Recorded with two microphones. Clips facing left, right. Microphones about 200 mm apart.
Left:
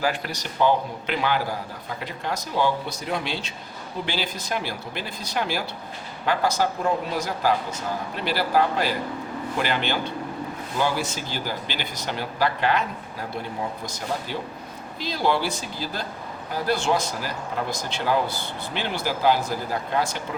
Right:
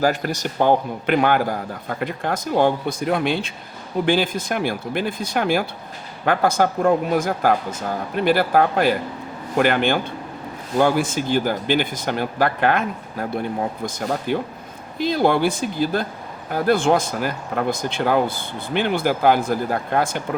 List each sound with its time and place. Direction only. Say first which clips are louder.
0.0 s speech: right 6 dB; 45° right (ahead or behind)